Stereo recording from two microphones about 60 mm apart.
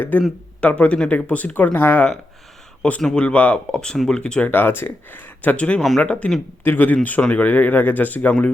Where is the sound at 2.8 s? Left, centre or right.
Left.